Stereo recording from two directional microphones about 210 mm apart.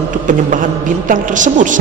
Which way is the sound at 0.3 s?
40° right (ahead or behind).